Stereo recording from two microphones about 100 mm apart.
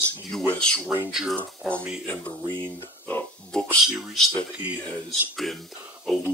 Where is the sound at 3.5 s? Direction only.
15° left (ahead or behind).